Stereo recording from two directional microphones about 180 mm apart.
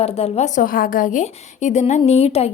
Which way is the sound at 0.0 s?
35° left (ahead or behind).